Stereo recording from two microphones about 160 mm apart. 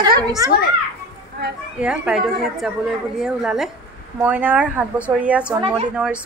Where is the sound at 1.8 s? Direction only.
5° right (ahead or behind).